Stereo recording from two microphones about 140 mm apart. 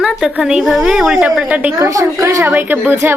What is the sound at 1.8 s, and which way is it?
A woman's voice, 20° right (ahead or behind).